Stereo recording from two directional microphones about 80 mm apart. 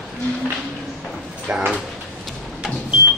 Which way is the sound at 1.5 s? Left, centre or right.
Centre.